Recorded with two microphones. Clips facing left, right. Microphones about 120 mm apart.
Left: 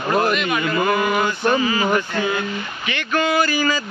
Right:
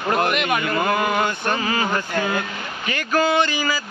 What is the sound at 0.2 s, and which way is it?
Speech, 60° right (ahead or behind).